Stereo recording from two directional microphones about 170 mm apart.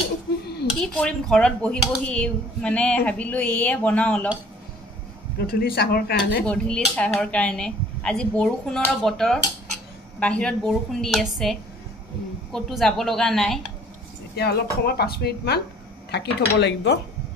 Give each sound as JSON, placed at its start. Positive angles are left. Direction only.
{"t": 0.7, "sound": "speech", "side_deg": 5}
{"t": 5.5, "sound": "speech", "side_deg": 65}
{"t": 6.4, "sound": "speech", "side_deg": 5}
{"t": 12.5, "sound": "speech", "side_deg": 0}
{"t": 14.3, "sound": "speech", "side_deg": 70}
{"t": 16.1, "sound": "speech", "side_deg": 90}